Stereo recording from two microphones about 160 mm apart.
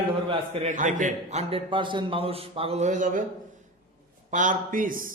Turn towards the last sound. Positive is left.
turn(degrees=-60)  # may be behind; listen again after turning